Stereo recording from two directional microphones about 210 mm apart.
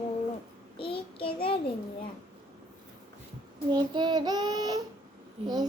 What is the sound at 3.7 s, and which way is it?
Child singing, 20° right (ahead or behind).